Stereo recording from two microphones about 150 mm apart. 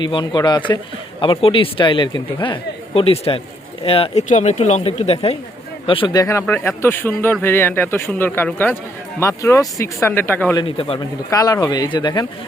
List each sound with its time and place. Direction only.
0.0 s speech: 30° left (ahead or behind)
6.4 s speech: 15° left (ahead or behind)
10.6 s speech: 40° left (ahead or behind)
11.3 s speech: 20° left (ahead or behind)